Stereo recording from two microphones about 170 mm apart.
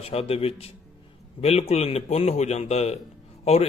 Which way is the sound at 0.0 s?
35° left (ahead or behind).